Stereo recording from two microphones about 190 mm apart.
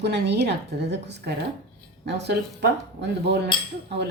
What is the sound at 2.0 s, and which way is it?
Speech, 60° right (ahead or behind).